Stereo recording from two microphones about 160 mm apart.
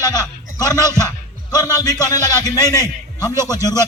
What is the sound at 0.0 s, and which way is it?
A man's voice, 20° left (ahead or behind).